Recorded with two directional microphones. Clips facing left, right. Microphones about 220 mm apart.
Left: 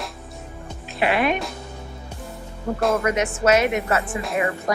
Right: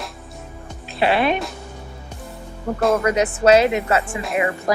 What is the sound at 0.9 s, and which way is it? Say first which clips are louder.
Speech: right 2 dB; 30° right (ahead or behind).